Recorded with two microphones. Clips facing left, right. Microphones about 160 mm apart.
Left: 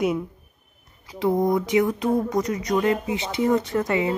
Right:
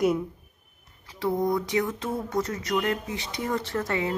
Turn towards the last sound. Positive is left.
turn(degrees=15)  # may be behind; listen again after turning